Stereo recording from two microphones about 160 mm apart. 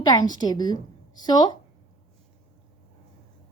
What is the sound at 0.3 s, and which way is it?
A woman's voice, 25° left (ahead or behind).